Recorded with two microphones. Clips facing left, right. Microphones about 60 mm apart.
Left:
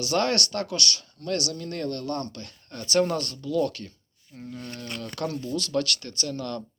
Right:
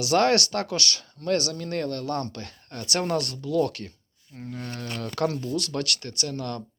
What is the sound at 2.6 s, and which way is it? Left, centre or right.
Speech, right.